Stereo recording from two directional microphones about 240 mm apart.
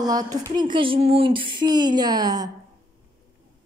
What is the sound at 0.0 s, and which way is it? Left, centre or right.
Speech, centre.